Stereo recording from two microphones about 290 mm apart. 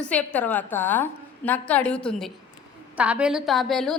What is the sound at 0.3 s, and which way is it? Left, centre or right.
A woman's voice, centre.